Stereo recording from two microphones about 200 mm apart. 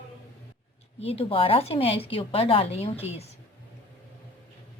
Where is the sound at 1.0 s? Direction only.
30° left (ahead or behind).